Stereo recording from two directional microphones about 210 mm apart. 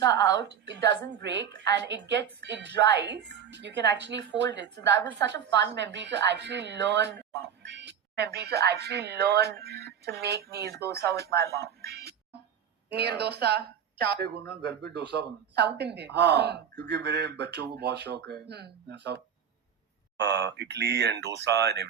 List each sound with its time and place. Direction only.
0.3 s a woman's voice: 55° right (ahead or behind)